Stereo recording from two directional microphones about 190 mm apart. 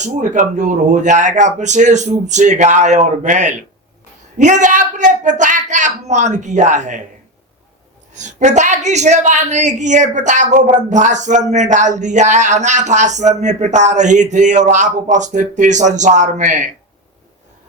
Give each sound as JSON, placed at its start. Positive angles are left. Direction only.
{"t": 0.0, "sound": "a woman's voice", "side_deg": -40}
{"t": 8.1, "sound": "a woman's voice", "side_deg": -40}